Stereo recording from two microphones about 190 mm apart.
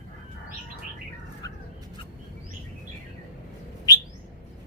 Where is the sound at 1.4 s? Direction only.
20° left (ahead or behind).